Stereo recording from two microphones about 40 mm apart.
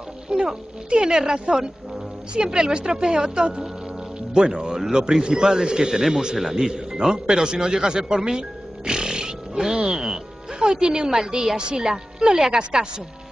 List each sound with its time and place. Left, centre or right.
0.3 s speech: right